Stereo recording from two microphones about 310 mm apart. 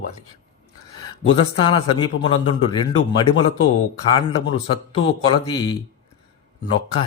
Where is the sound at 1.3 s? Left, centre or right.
Centre.